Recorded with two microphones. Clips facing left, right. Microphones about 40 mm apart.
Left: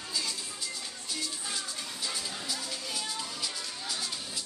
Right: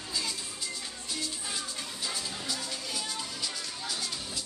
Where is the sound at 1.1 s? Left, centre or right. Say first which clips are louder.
Even; centre.